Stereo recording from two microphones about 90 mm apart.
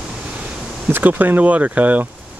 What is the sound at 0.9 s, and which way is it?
Speech, 20° right (ahead or behind).